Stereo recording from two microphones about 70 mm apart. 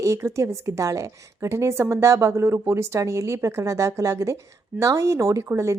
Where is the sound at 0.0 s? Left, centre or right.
Right.